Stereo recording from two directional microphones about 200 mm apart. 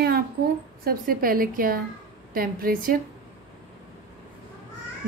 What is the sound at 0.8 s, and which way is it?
A woman's voice, 45° right (ahead or behind).